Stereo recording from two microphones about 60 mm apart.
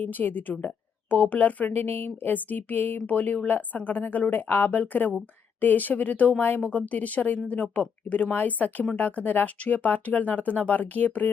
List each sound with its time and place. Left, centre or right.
0.0 s speech: left